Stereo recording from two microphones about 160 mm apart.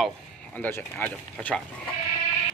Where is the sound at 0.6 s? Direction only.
15° left (ahead or behind).